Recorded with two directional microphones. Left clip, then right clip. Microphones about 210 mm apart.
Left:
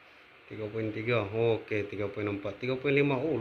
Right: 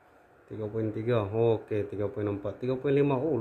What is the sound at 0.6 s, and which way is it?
A man's voice, 15° right (ahead or behind).